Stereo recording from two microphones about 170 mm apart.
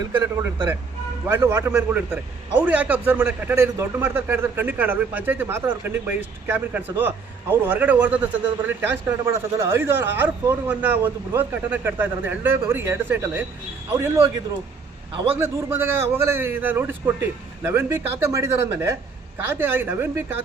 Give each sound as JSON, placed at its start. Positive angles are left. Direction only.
{"t": 0.0, "sound": "a man's voice", "side_deg": -15}
{"t": 15.1, "sound": "a man's voice", "side_deg": -30}
{"t": 15.4, "sound": "a man's voice", "side_deg": -15}